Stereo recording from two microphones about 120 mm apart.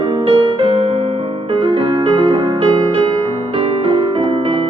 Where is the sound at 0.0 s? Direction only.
50° right (ahead or behind).